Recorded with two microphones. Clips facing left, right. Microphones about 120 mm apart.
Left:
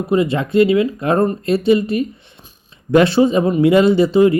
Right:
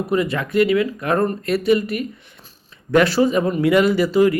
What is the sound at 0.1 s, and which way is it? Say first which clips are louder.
Speech: left 6 dB; 25° left (ahead or behind).